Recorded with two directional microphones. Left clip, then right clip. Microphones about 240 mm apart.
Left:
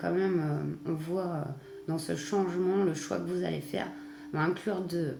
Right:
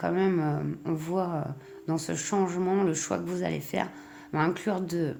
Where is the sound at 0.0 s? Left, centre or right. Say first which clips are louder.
Right 3 dB; right.